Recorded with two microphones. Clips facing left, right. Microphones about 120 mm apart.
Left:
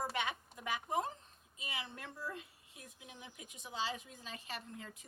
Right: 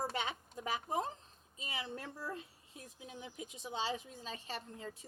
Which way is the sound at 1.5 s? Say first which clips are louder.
Right 3 dB; 35° right (ahead or behind).